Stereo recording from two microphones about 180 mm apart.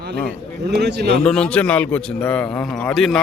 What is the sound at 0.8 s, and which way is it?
Speech, 65° right (ahead or behind).